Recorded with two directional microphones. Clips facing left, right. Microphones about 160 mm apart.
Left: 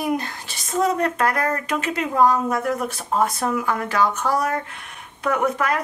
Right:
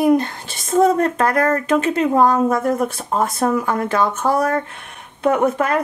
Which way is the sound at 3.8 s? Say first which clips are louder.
Right 3 dB; 25° right (ahead or behind).